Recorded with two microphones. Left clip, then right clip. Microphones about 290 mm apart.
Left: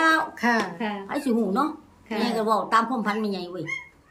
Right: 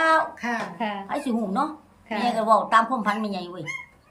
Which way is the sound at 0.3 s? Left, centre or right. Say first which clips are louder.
Left 6 dB; centre.